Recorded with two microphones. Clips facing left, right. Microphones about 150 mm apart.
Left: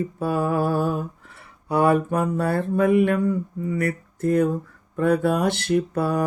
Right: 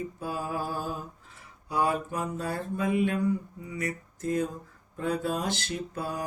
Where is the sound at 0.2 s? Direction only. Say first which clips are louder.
Left 12 dB; 65° left (ahead or behind).